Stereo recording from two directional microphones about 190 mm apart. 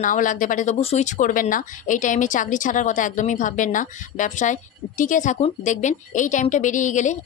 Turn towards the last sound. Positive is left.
turn(degrees=40)  # may be behind; listen again after turning